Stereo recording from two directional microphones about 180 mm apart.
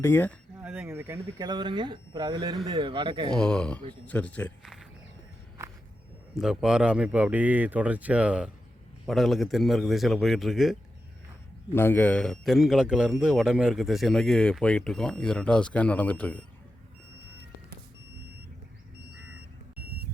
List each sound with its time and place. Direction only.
0.0 s speech: 10° left (ahead or behind)
0.6 s speech: 10° right (ahead or behind); by 3.2 s 25° right (ahead or behind)
3.3 s speech: 5° left (ahead or behind)
6.3 s a man's voice: 5° right (ahead or behind)
11.7 s a man's voice: 10° left (ahead or behind)